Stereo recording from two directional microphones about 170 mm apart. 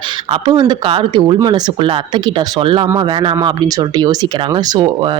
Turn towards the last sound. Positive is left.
turn(degrees=-25)  # may be behind; listen again after turning